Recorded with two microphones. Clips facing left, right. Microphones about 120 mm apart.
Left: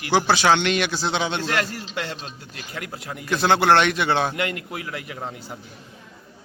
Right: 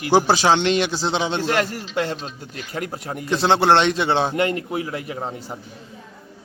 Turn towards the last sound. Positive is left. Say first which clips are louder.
# right 4 dB
turn(degrees=-35)  # may be behind; listen again after turning